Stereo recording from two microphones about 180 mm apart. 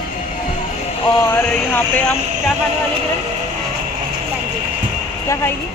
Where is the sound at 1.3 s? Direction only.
10° left (ahead or behind).